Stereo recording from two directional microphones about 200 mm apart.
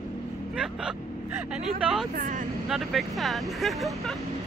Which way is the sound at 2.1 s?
40° right (ahead or behind).